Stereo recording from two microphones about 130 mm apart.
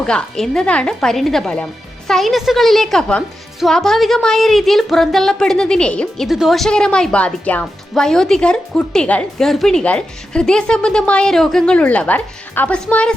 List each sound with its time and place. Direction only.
0.0 s a woman's voice: 5° left (ahead or behind)